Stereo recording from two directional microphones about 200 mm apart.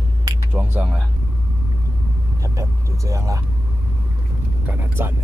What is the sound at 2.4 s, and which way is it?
Speech, 15° right (ahead or behind).